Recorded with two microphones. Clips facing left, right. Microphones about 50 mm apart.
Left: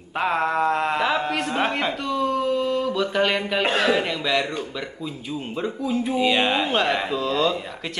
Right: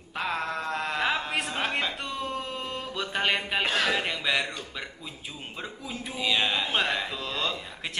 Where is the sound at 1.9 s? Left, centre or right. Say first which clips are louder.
Left 9 dB; centre.